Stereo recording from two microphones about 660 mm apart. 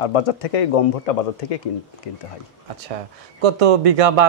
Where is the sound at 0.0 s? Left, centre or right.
Left.